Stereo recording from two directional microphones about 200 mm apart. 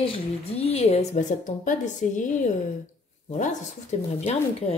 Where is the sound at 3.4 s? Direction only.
35° left (ahead or behind).